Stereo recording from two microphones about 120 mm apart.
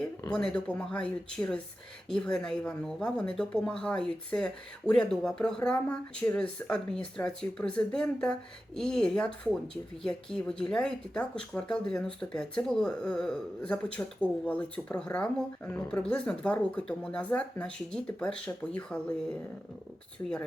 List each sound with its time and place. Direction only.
0.3 s speech: 10° left (ahead or behind)